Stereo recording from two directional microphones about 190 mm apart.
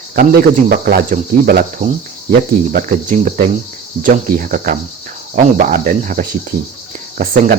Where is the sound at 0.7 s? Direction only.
50° right (ahead or behind).